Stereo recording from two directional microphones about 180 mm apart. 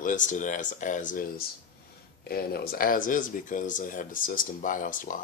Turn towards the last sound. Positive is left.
turn(degrees=45)  # may be behind; listen again after turning